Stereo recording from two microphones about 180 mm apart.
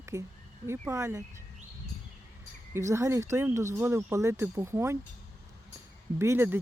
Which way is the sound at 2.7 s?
15° right (ahead or behind).